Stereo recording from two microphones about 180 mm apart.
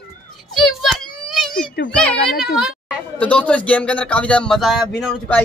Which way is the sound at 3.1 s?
5° left (ahead or behind).